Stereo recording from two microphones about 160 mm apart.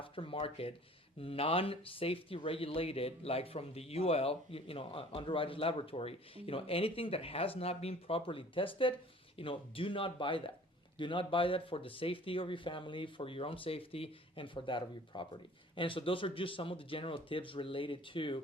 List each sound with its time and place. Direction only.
0.0 s speech: 35° left (ahead or behind)